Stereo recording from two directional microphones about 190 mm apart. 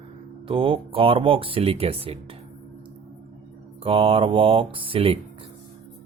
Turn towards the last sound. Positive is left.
turn(degrees=-30)  # may be behind; listen again after turning